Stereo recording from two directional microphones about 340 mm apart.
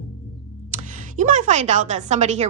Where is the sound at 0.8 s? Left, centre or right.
Right.